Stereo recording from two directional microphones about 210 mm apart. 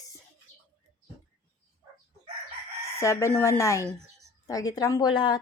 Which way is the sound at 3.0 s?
15° left (ahead or behind).